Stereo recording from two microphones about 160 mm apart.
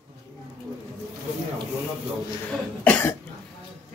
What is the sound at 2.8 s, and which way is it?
Cough, 10° left (ahead or behind).